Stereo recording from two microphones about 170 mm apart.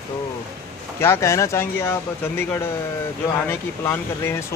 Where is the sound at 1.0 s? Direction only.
15° left (ahead or behind).